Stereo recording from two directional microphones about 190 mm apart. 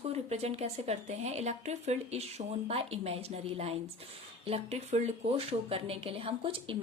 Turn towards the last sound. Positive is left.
turn(degrees=-30)  # may be behind; listen again after turning